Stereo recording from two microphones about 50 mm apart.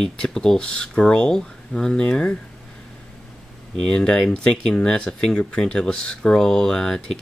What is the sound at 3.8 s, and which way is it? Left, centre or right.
Speech, centre.